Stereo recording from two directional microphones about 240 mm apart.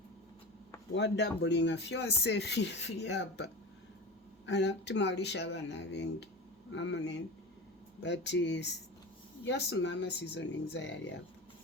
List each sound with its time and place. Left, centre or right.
0.9 s speech: left